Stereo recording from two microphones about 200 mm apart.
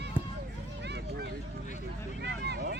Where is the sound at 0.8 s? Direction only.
55° right (ahead or behind).